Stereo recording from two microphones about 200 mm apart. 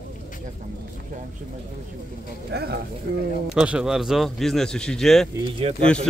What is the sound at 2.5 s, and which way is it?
Speech, 55° right (ahead or behind).